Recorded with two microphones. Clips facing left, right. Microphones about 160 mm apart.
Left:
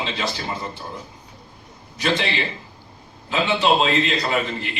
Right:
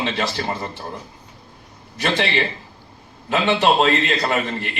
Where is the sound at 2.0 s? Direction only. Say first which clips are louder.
Right 2 dB; 55° right (ahead or behind).